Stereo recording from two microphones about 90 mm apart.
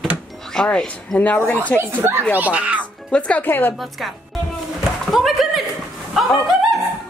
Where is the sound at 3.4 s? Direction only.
20° left (ahead or behind).